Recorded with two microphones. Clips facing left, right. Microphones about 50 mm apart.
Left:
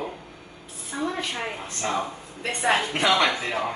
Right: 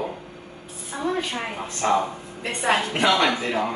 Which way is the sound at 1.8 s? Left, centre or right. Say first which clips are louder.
Right 7 dB; centre.